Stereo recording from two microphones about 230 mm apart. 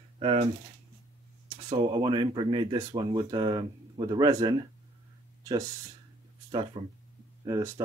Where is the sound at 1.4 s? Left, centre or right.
Right.